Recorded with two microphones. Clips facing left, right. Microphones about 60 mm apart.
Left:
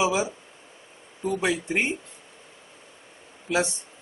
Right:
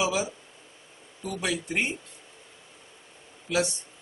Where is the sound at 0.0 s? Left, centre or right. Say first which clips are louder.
Left 3 dB; left.